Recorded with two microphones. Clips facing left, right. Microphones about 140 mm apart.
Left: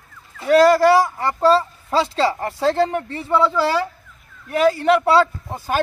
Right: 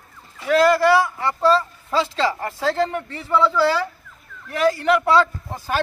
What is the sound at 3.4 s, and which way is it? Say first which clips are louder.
Speech: even; 20° left (ahead or behind).